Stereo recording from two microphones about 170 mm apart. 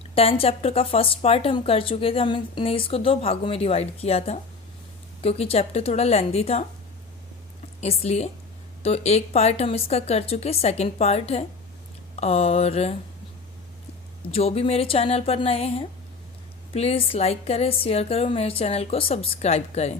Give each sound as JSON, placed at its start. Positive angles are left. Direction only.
{"t": 0.1, "sound": "speech", "side_deg": 35}
{"t": 7.8, "sound": "speech", "side_deg": 40}
{"t": 14.3, "sound": "speech", "side_deg": 35}